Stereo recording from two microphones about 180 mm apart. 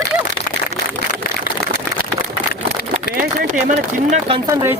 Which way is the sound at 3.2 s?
45° right (ahead or behind).